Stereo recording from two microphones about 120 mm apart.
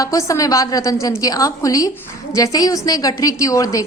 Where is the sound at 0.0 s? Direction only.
25° left (ahead or behind).